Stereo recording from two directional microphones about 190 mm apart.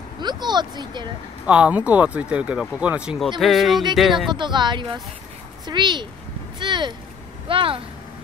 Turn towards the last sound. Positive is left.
turn(degrees=-30)  # may be behind; listen again after turning